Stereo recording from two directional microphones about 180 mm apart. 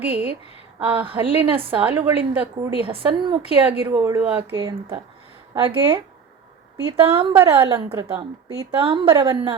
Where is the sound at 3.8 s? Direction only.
20° right (ahead or behind).